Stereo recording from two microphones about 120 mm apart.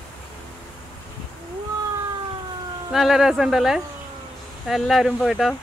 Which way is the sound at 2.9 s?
5° right (ahead or behind).